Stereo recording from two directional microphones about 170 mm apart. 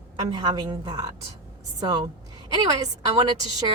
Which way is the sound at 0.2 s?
25° right (ahead or behind).